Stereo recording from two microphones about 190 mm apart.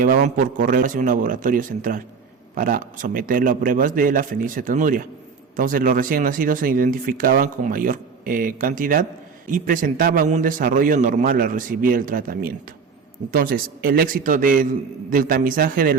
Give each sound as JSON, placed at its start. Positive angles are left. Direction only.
{"t": 0.0, "sound": "speech", "side_deg": -45}